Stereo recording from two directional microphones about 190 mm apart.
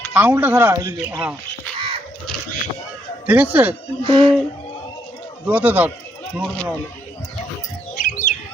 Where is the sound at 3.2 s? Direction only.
10° right (ahead or behind).